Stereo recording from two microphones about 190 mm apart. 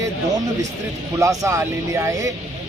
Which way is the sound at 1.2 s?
15° right (ahead or behind).